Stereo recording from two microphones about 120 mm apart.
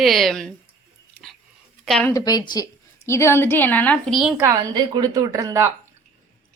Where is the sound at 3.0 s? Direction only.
20° left (ahead or behind).